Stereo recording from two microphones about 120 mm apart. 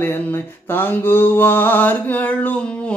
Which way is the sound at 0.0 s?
20° left (ahead or behind).